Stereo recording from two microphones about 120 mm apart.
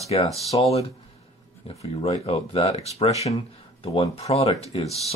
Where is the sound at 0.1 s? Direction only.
60° left (ahead or behind).